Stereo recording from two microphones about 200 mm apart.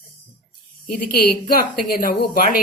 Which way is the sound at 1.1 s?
50° left (ahead or behind).